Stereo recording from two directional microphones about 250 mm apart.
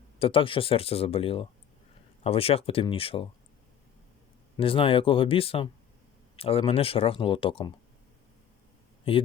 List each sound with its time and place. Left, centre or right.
0.2 s speech: left
4.5 s speech: left
9.1 s speech: left